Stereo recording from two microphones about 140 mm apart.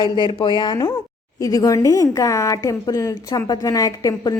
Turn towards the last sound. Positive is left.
turn(degrees=25)  # may be behind; listen again after turning